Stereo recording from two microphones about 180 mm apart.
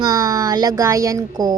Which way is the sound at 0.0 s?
20° right (ahead or behind).